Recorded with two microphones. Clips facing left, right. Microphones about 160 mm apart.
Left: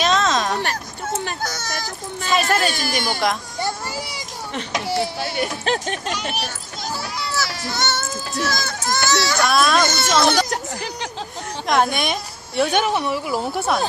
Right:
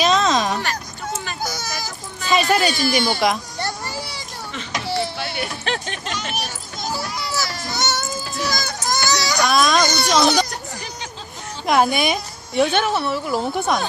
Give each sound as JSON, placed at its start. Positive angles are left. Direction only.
{"t": 0.0, "sound": "a sound", "side_deg": 0}
{"t": 1.1, "sound": "baby cry", "side_deg": 60}
{"t": 1.4, "sound": "baby cry", "side_deg": 0}
{"t": 3.2, "sound": "a child's voice", "side_deg": 0}
{"t": 3.6, "sound": "children playing", "side_deg": 15}
{"t": 4.9, "sound": "speech", "side_deg": 40}
{"t": 6.8, "sound": "a child's voice", "side_deg": -5}
{"t": 10.5, "sound": "a sound", "side_deg": 75}
{"t": 11.6, "sound": "a woman's voice", "side_deg": -5}
{"t": 12.7, "sound": "speech", "side_deg": 15}